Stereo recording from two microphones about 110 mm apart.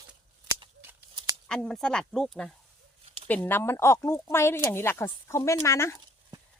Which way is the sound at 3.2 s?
15° left (ahead or behind).